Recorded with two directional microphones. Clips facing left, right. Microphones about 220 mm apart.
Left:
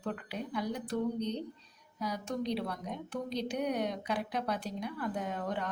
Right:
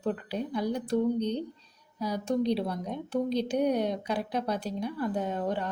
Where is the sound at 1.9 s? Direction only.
30° right (ahead or behind).